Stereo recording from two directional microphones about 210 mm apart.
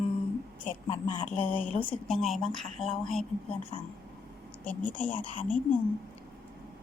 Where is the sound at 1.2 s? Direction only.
35° left (ahead or behind).